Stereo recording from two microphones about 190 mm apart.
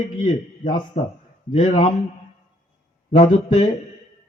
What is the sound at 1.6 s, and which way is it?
Speech, 30° left (ahead or behind).